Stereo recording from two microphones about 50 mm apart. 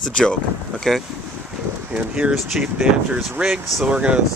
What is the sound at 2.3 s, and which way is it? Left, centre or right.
Speech, centre.